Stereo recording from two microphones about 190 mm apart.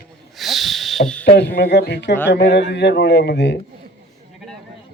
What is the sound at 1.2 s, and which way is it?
Speech, 60° left (ahead or behind).